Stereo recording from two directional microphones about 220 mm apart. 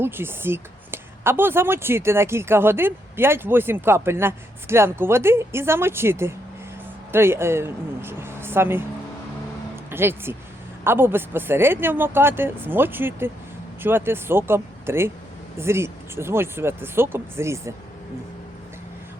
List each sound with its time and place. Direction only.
0.0 s speech: 10° right (ahead or behind)
9.9 s speech: 10° right (ahead or behind)